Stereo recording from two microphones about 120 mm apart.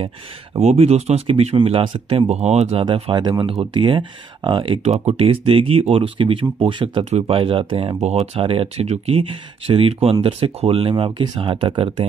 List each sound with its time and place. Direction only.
0.6 s speech: 60° right (ahead or behind)
2.8 s speech: 40° right (ahead or behind)
7.1 s speech: 60° right (ahead or behind)
11.1 s speech: 40° right (ahead or behind)